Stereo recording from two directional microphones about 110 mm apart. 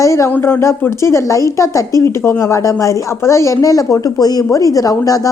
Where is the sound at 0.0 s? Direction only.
30° left (ahead or behind).